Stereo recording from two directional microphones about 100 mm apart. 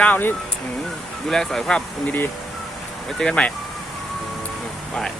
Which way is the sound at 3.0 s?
5° left (ahead or behind).